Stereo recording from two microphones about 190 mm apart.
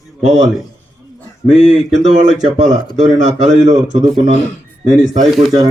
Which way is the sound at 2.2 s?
40° right (ahead or behind).